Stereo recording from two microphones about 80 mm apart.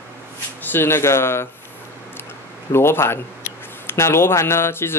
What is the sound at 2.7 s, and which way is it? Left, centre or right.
Speech, left.